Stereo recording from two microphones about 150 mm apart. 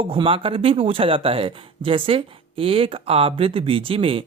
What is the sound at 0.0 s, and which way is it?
Speech, 35° right (ahead or behind).